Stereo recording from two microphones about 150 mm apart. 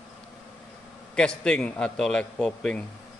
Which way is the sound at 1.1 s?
5° left (ahead or behind).